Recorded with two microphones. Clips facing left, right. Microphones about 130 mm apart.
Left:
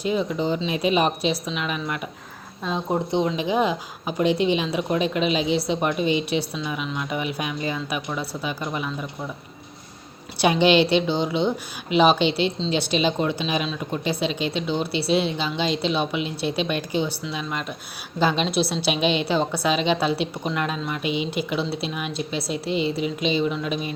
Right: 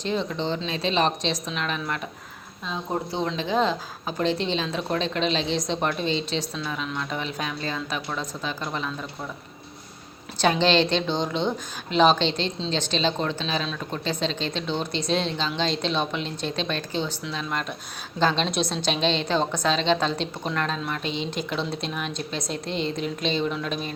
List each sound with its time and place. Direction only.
0.0 s a woman's voice: 5° left (ahead or behind)
10.3 s a woman's voice: 10° left (ahead or behind)